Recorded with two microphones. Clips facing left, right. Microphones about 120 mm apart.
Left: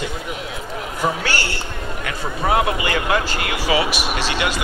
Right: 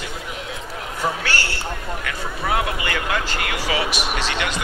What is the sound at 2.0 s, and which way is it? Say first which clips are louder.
Speech: left 7 dB; 25° left (ahead or behind).